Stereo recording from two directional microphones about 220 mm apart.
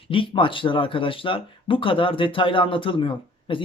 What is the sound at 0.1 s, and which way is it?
Speech, 25° left (ahead or behind).